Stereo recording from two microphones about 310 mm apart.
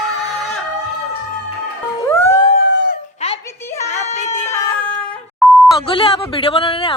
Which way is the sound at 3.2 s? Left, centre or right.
Left.